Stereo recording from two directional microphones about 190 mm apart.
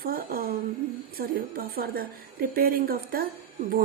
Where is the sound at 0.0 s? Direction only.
50° right (ahead or behind).